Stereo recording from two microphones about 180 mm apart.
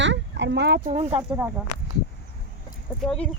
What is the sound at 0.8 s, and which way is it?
Speech, 35° right (ahead or behind).